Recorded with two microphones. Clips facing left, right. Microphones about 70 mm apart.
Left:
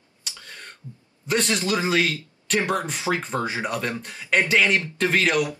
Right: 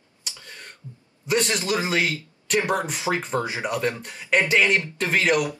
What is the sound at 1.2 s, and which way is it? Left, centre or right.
Speech, centre.